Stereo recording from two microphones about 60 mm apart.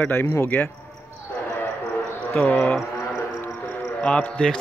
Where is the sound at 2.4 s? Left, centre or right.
Left.